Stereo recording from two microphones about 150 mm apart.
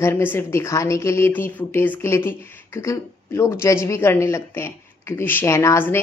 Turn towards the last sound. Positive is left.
turn(degrees=15)  # may be behind; listen again after turning